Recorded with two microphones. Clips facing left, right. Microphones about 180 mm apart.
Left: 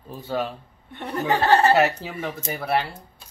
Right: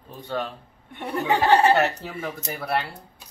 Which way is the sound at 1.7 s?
Centre (ahead or behind).